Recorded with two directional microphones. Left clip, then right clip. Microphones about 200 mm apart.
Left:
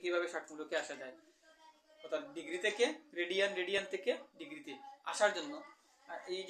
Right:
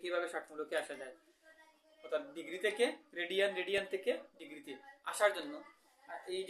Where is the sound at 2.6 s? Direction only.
15° right (ahead or behind).